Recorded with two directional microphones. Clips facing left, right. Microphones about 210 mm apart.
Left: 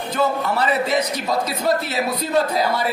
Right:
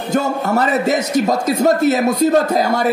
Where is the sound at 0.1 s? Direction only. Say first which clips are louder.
Right 4 dB; 45° right (ahead or behind).